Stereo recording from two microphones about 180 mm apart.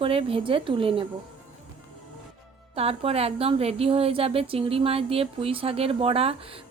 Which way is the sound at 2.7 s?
35° right (ahead or behind).